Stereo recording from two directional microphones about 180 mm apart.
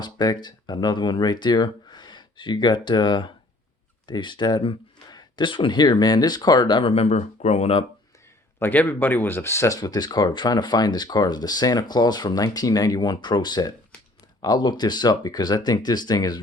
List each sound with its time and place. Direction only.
0.0 s speech: 25° left (ahead or behind)
8.5 s speech: 10° left (ahead or behind)